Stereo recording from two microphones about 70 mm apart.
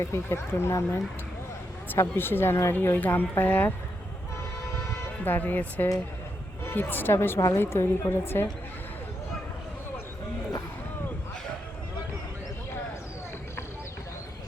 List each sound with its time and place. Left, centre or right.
0.0 s a woman's voice: left
5.2 s a woman's voice: left